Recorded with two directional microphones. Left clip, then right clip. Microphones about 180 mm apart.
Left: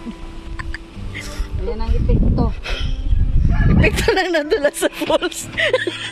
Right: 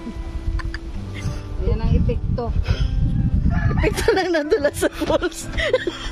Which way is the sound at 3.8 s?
5° right (ahead or behind).